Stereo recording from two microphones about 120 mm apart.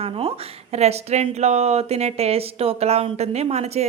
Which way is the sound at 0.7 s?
65° right (ahead or behind).